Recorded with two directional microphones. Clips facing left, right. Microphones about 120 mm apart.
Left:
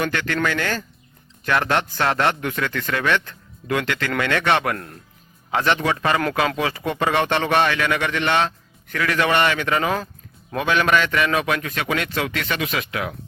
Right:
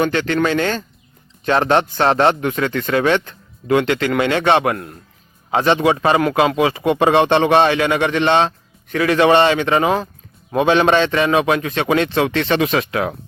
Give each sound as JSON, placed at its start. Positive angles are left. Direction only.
{"t": 0.0, "sound": "speech", "side_deg": -20}